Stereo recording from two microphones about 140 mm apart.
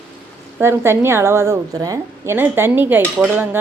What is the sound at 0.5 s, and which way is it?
A woman's voice, 15° right (ahead or behind).